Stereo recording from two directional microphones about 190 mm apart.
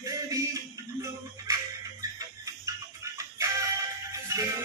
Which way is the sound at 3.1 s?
15° right (ahead or behind).